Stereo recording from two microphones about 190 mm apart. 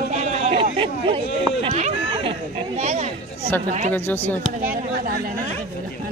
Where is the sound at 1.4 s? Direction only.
30° right (ahead or behind).